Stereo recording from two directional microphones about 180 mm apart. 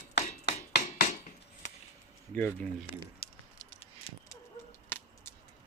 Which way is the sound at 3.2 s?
55° left (ahead or behind).